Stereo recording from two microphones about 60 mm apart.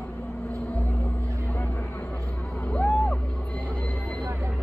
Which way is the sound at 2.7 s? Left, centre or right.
Left.